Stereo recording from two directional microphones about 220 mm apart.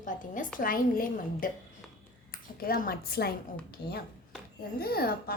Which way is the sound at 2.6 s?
40° left (ahead or behind).